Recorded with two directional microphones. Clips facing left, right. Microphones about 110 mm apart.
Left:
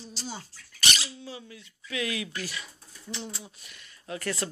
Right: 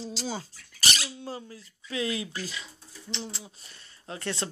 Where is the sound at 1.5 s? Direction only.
30° right (ahead or behind).